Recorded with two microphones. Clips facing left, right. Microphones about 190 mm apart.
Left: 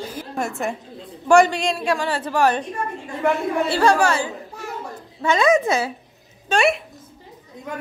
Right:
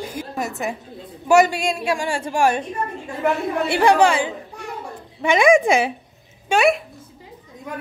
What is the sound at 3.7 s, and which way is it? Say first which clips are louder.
A woman's voice: right 3 dB; 15° right (ahead or behind).